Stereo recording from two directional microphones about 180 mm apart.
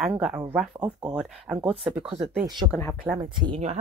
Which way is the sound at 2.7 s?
5° left (ahead or behind).